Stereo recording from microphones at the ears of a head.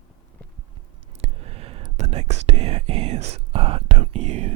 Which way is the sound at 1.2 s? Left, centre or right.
Right.